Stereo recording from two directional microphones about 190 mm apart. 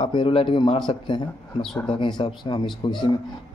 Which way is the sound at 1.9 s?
25° left (ahead or behind).